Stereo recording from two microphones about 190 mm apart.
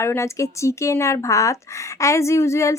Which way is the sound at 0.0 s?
15° left (ahead or behind).